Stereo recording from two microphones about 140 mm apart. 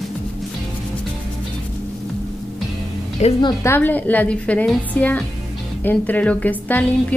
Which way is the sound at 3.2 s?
50° left (ahead or behind).